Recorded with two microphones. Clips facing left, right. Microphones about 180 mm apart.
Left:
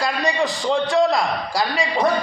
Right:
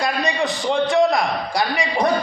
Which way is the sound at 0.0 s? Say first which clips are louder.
Even; 20° right (ahead or behind).